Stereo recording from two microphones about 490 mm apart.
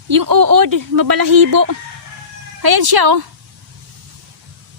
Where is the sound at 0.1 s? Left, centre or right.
Right.